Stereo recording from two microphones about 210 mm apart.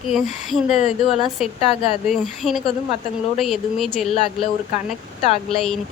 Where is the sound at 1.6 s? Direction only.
30° left (ahead or behind).